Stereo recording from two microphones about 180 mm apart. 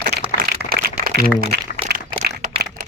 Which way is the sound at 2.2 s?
65° right (ahead or behind).